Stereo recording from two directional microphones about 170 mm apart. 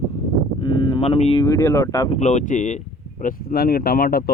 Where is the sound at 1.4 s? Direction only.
20° left (ahead or behind).